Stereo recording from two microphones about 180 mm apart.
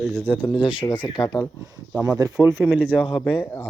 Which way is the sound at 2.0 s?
20° right (ahead or behind).